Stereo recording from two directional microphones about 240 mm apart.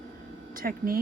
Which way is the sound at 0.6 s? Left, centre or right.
Right.